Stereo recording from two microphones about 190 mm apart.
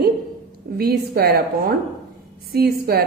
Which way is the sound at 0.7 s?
55° right (ahead or behind).